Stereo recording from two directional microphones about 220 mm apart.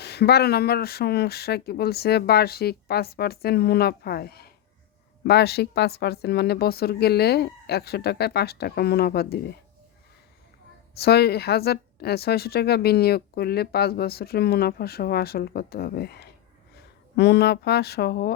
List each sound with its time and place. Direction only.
0.0 s a woman's voice: 50° left (ahead or behind)
10.9 s a woman's voice: 45° left (ahead or behind)